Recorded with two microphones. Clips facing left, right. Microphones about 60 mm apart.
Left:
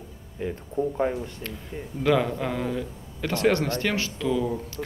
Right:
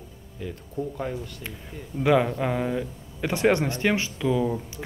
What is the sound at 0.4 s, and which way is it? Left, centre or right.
Speech, left.